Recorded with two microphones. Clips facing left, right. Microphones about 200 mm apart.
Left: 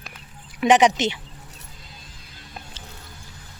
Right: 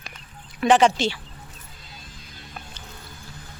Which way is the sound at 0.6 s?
20° left (ahead or behind).